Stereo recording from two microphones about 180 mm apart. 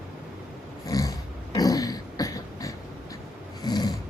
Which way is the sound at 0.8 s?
20° left (ahead or behind).